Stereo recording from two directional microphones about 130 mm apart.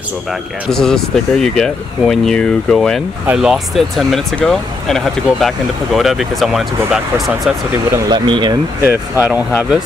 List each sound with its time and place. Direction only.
0.3 s speech: 5° left (ahead or behind)
8.1 s speech: 35° right (ahead or behind)
8.8 s speech: 15° right (ahead or behind)